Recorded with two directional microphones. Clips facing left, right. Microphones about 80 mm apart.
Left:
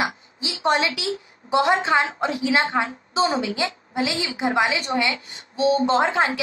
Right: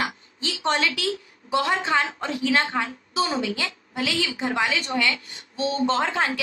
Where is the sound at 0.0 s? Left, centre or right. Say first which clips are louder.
Left 2 dB; centre.